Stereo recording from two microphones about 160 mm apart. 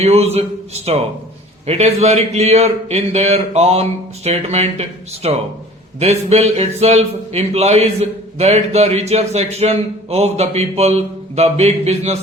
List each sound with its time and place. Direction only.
0.0 s a man's voice: 40° right (ahead or behind)